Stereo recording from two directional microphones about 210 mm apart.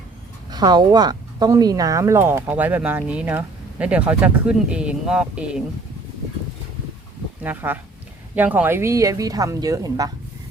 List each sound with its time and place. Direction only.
0.5 s speech: 20° right (ahead or behind)
7.4 s speech: 10° right (ahead or behind)